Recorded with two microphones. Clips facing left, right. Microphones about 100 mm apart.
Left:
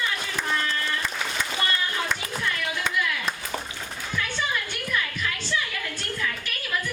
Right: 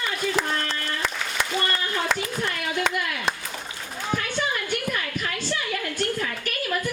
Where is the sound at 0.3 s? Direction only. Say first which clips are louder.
Right 1 dB; 75° right (ahead or behind).